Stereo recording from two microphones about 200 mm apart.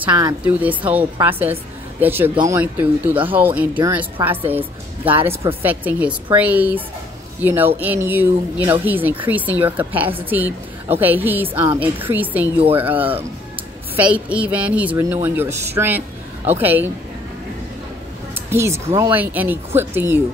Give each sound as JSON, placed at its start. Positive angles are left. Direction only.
{"t": 0.0, "sound": "a woman's voice", "side_deg": -15}
{"t": 13.9, "sound": "speech", "side_deg": -5}
{"t": 18.5, "sound": "speech", "side_deg": -15}